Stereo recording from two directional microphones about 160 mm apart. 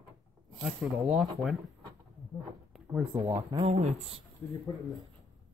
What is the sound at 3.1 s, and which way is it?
Speech, 30° right (ahead or behind).